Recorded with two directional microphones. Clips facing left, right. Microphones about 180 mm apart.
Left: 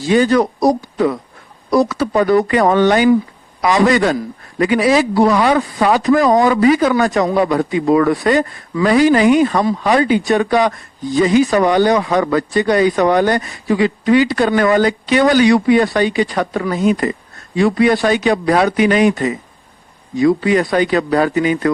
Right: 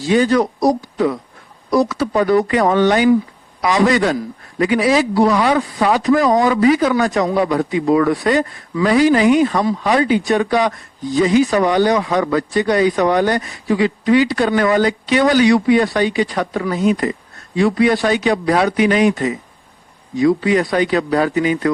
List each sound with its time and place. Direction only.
0.1 s a man's voice: 55° left (ahead or behind)